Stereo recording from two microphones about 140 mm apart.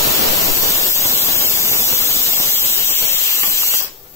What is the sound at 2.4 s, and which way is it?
Steam, 20° left (ahead or behind).